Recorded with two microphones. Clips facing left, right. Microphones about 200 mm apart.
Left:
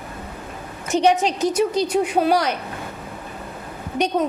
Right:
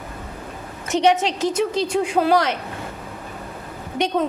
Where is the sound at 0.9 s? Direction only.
25° right (ahead or behind).